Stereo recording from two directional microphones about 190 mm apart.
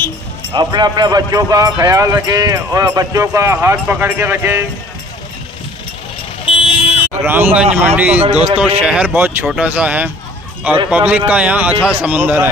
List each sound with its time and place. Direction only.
0.5 s speech: 20° right (ahead or behind)
6.4 s vehicle: 30° left (ahead or behind)
7.1 s speech: 10° right (ahead or behind)